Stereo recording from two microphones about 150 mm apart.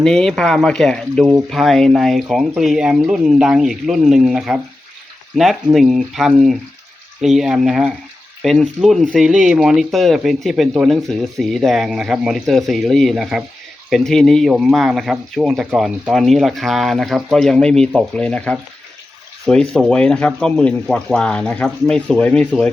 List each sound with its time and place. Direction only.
0.0 s speech: 5° left (ahead or behind)
5.7 s speech: centre (ahead or behind)